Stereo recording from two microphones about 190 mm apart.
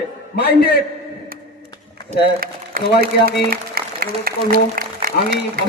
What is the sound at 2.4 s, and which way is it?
A man's voice, 50° right (ahead or behind).